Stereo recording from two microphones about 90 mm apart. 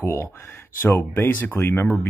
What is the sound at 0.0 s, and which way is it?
Speech, 30° left (ahead or behind).